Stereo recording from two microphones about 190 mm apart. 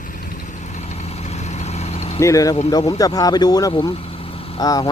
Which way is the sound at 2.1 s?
15° left (ahead or behind).